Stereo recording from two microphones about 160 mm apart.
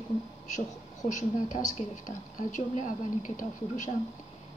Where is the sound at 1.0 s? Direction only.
50° left (ahead or behind).